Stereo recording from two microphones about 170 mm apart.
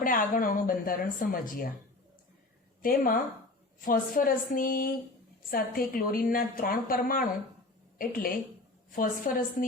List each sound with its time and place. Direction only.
0.0 s a woman's voice: 55° left (ahead or behind)
2.8 s a woman's voice: 55° left (ahead or behind)